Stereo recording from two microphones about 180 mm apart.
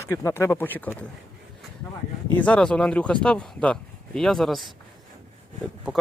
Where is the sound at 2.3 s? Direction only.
5° left (ahead or behind).